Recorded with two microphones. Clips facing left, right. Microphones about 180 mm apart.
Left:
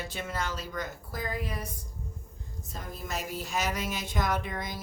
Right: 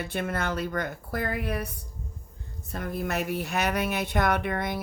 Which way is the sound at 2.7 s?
65° right (ahead or behind).